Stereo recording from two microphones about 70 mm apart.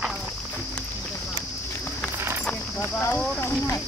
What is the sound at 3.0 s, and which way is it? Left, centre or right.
Clip-clop, left.